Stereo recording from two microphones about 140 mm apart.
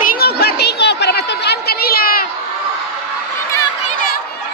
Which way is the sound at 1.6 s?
90° left.